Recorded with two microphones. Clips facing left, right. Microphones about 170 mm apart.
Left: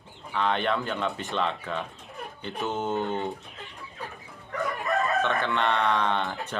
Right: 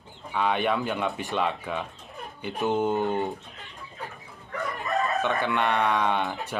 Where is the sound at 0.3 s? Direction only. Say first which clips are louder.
Right 1 dB; 10° right (ahead or behind).